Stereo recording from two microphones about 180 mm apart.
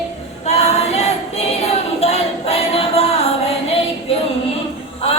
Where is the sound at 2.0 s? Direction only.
35° left (ahead or behind).